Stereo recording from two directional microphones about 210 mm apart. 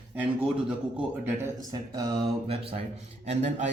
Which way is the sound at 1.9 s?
20° right (ahead or behind).